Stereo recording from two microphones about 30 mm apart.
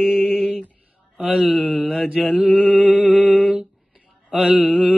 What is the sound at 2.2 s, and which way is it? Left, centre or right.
Mantra, right.